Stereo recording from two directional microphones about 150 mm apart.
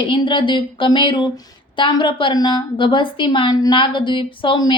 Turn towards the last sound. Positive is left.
turn(degrees=30)  # may be behind; listen again after turning